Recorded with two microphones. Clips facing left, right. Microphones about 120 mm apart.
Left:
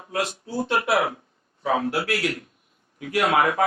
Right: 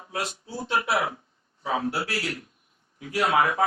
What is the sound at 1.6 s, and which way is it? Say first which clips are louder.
A man's voice: left 4 dB; 65° left (ahead or behind).